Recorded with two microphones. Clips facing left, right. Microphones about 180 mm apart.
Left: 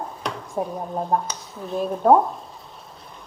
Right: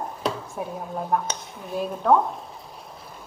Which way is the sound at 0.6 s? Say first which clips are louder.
Left 4 dB; 30° left (ahead or behind).